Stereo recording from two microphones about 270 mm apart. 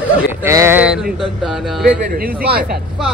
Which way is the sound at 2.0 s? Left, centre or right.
Right.